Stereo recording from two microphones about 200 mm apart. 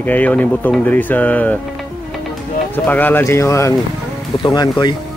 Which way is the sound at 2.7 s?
10° left (ahead or behind).